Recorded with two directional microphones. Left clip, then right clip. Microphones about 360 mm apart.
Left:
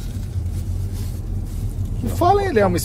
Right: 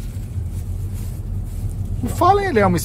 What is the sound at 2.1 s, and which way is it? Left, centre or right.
Speech, right.